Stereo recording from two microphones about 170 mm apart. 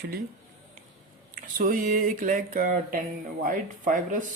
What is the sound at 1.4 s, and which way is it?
Speech, 55° right (ahead or behind).